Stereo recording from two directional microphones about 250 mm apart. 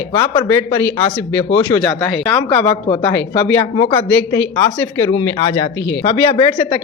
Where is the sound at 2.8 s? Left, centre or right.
Left.